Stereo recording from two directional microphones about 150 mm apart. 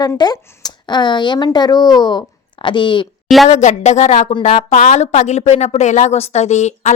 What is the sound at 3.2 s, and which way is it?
Speech, centre (ahead or behind).